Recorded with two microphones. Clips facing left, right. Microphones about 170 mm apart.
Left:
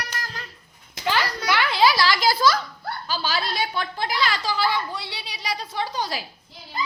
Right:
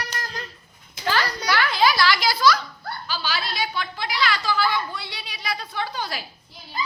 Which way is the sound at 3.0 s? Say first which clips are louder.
Left 3 dB; 45° left (ahead or behind).